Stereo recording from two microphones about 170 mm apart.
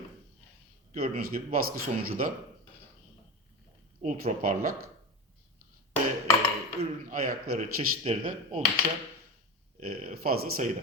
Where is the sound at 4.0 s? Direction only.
45° right (ahead or behind).